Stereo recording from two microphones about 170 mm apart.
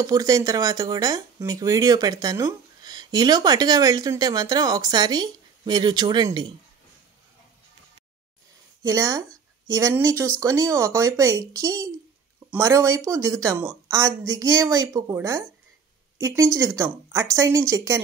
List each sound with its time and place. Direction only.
0.0 s speech: 20° right (ahead or behind)
8.8 s speech: 20° right (ahead or behind)